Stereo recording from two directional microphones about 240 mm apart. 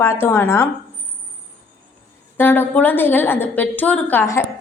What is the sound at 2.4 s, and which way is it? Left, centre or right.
A woman's voice, centre.